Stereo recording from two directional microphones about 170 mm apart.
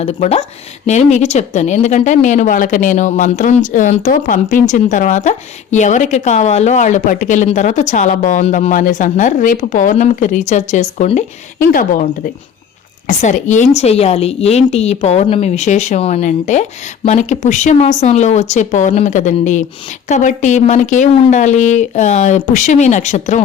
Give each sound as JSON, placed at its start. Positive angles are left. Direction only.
{"t": 0.0, "sound": "a woman's voice", "side_deg": 40}
{"t": 11.7, "sound": "a woman's voice", "side_deg": 55}